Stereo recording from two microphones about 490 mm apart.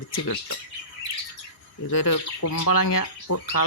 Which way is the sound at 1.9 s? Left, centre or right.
Left.